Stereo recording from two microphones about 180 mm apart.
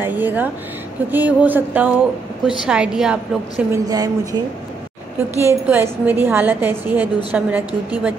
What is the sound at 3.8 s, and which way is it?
Speech, 20° right (ahead or behind).